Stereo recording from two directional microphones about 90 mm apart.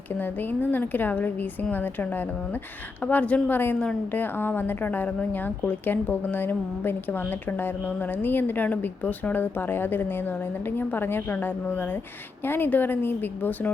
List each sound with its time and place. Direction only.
0.2 s a woman's voice: 20° left (ahead or behind)